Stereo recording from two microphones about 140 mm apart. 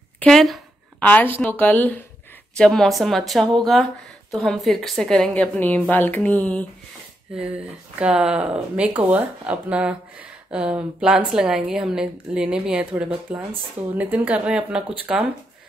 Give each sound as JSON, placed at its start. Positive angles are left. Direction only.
{"t": 0.2, "sound": "a sound", "side_deg": 0}
{"t": 1.0, "sound": "a woman's voice", "side_deg": 15}
{"t": 7.3, "sound": "a woman's voice", "side_deg": -10}